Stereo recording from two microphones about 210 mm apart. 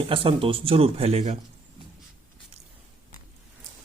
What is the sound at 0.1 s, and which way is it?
Speech, 25° right (ahead or behind).